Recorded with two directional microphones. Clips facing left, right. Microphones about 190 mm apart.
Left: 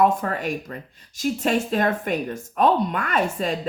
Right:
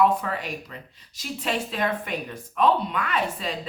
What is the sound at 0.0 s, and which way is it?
A woman's voice, 45° left (ahead or behind).